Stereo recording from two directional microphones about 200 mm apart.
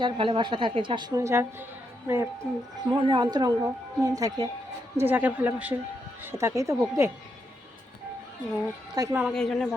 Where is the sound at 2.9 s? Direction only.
25° right (ahead or behind).